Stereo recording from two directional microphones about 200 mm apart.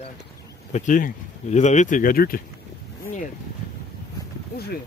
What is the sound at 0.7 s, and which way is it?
Speech, 40° left (ahead or behind).